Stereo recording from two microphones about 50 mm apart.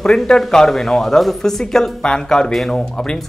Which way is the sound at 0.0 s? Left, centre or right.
Centre.